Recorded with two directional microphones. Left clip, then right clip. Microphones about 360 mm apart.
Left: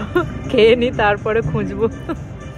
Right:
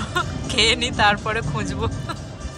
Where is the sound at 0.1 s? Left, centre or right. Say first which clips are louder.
Left 7 dB; centre.